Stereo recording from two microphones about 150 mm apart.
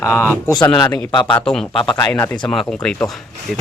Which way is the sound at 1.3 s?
5° left (ahead or behind).